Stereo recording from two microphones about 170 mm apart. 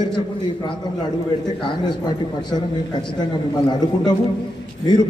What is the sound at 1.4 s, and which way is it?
A man's voice, 25° left (ahead or behind).